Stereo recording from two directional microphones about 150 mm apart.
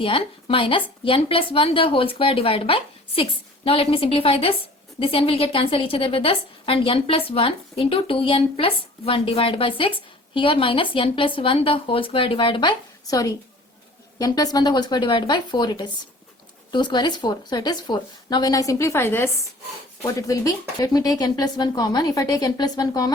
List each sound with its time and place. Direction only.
0.0 s a woman's voice: 35° left (ahead or behind)